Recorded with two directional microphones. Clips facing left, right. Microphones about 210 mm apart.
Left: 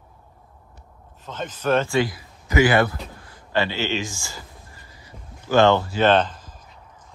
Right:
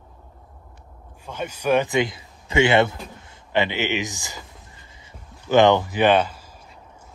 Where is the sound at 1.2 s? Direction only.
10° right (ahead or behind).